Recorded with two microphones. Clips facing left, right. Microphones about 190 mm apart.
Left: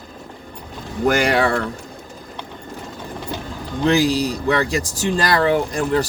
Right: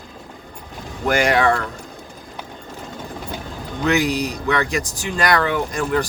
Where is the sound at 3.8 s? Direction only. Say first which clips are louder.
Left 3 dB; 30° left (ahead or behind).